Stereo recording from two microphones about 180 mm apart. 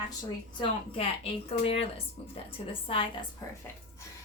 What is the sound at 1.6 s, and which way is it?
Speech, 35° left (ahead or behind).